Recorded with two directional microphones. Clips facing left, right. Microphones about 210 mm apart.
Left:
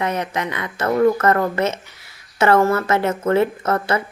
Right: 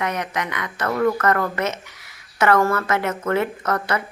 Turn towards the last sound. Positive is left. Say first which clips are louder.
# left 3 dB
turn(degrees=25)  # may be behind; listen again after turning